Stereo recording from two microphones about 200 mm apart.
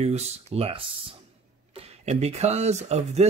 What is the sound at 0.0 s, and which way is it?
Speech, 30° right (ahead or behind).